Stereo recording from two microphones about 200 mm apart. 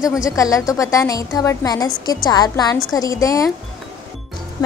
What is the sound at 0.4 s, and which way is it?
A woman's voice, 15° left (ahead or behind).